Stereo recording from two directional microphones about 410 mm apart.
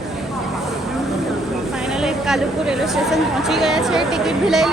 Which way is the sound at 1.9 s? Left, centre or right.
Centre.